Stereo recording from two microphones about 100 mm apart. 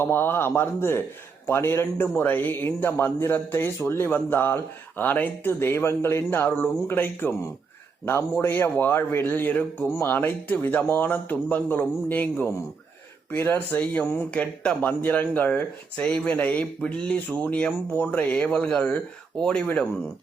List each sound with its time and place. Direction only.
0.0 s speech: 20° left (ahead or behind)